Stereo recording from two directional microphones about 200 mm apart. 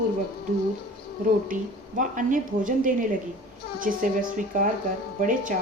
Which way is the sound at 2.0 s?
40° right (ahead or behind).